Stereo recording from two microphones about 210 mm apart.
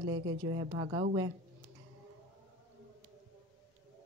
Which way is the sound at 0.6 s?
90° right.